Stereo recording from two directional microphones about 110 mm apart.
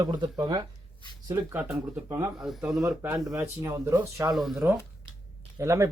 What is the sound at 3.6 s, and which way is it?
Speech, 25° right (ahead or behind).